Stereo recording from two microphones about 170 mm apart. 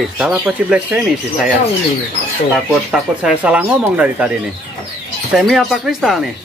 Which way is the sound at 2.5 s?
5° right (ahead or behind).